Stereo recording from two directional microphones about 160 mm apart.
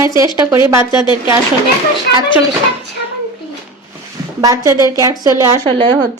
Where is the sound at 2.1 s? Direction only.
90° left.